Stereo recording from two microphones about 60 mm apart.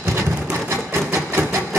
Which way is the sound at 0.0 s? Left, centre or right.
Right.